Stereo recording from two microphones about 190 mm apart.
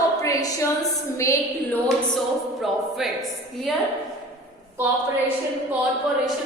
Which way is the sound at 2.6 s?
Centre (ahead or behind).